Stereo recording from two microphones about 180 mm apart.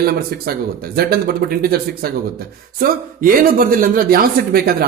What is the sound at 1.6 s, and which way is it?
Speech, 55° right (ahead or behind).